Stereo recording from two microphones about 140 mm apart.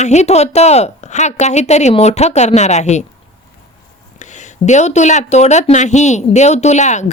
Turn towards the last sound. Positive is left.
turn(degrees=55)  # may be behind; listen again after turning